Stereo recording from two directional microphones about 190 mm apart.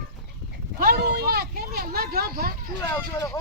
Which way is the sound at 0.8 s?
55° right (ahead or behind).